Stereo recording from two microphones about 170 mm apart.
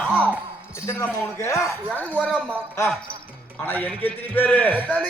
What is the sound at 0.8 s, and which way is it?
Speech, 15° left (ahead or behind).